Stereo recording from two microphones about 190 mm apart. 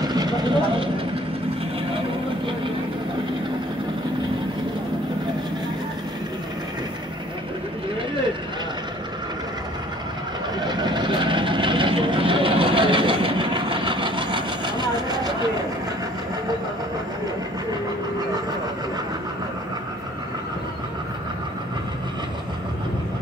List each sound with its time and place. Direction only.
0.0 s vehicle: 20° right (ahead or behind)
10.6 s vehicle: 25° right (ahead or behind)